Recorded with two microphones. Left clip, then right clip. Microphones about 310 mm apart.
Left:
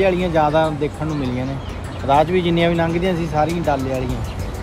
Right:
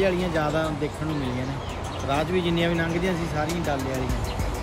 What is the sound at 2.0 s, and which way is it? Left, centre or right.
Speech, centre.